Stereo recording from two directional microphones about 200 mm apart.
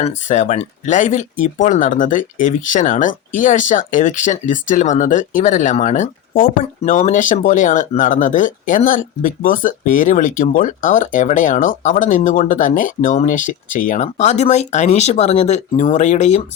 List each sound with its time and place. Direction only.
0.0 s speech: 35° left (ahead or behind)